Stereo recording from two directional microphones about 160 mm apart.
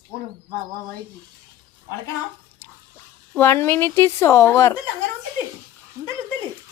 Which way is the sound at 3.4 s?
15° left (ahead or behind).